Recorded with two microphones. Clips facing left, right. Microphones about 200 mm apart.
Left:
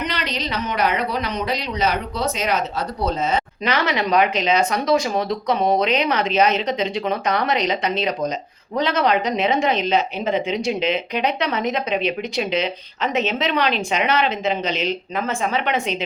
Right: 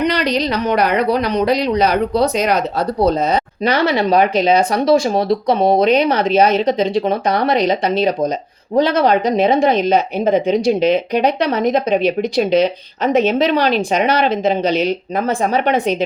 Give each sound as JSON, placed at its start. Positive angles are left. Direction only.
{"t": 0.1, "sound": "speech", "side_deg": -40}
{"t": 9.7, "sound": "speech", "side_deg": -50}